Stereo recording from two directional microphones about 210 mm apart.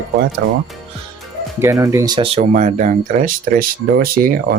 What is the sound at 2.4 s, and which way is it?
Speech, 35° right (ahead or behind).